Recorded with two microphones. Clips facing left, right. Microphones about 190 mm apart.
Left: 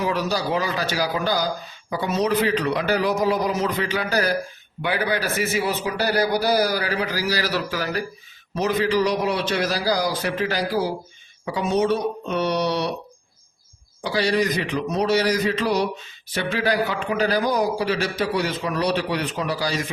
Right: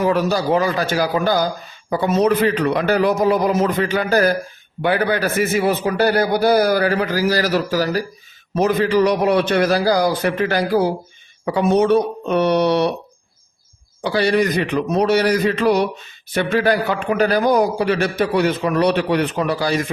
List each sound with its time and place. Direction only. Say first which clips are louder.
0.0 s a man's voice: right 6 dB; 50° right (ahead or behind)
8.5 s a man's voice: right 5 dB; 50° right (ahead or behind)
14.0 s a man's voice: right 4 dB; 60° right (ahead or behind)